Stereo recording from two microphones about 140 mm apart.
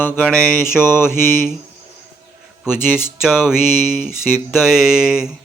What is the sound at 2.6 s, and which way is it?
Speech, 5° right (ahead or behind).